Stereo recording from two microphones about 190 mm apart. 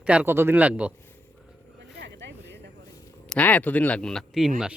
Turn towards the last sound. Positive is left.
turn(degrees=0)  # may be behind; listen again after turning